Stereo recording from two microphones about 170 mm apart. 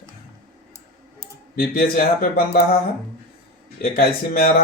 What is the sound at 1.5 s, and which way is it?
Speech, 60° left (ahead or behind).